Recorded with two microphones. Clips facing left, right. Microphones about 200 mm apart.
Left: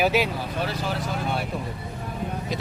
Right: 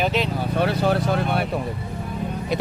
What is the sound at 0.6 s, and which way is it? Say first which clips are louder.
Speech: right 9 dB; 60° right (ahead or behind).